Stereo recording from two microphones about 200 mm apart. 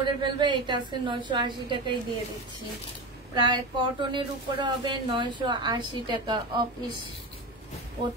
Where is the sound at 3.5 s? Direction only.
25° right (ahead or behind).